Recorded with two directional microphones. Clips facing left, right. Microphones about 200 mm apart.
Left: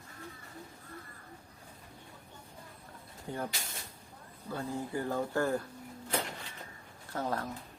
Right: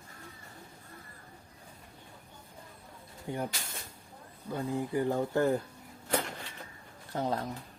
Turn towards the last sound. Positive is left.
turn(degrees=-20)  # may be behind; listen again after turning